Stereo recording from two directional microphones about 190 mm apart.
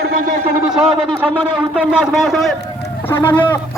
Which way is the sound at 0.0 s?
50° right (ahead or behind).